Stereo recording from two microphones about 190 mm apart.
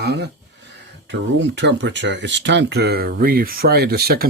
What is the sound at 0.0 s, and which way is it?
Speech, 60° right (ahead or behind).